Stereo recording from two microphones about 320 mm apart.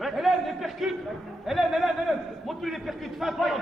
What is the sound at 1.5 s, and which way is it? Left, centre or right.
A man's voice, centre.